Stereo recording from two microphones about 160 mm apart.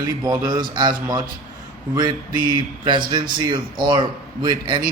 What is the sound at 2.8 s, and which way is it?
A man's voice, 30° right (ahead or behind).